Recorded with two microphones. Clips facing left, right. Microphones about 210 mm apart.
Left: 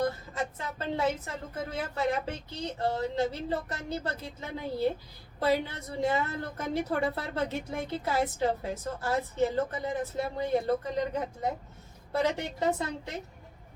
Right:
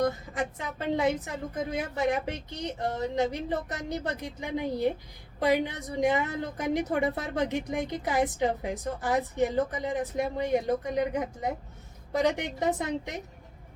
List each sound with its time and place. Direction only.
0.0 s a woman's voice: 15° right (ahead or behind)